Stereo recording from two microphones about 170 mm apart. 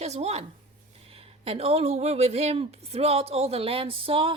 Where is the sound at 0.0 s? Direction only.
40° right (ahead or behind).